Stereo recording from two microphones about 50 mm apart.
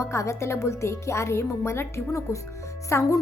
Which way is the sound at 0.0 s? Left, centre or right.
Left.